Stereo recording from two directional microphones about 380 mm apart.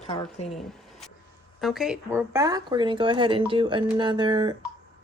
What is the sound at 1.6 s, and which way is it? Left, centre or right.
Speech, centre.